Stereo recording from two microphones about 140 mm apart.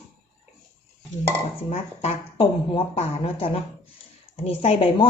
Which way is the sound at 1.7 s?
45° left (ahead or behind).